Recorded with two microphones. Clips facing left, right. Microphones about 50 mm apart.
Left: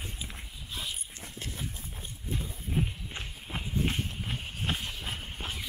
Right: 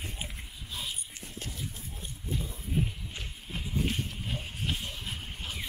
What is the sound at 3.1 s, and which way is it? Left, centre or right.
Horse, left.